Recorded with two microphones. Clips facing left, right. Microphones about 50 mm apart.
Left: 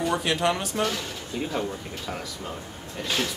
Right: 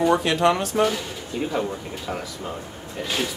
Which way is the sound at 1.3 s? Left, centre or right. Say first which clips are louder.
Right 4 dB; centre.